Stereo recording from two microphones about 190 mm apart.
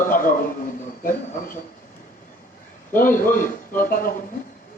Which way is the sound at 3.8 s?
45° left (ahead or behind).